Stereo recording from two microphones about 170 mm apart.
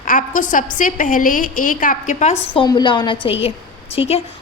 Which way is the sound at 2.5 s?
25° left (ahead or behind).